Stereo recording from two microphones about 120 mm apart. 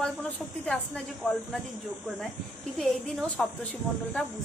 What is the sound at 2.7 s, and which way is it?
Speech, 5° left (ahead or behind).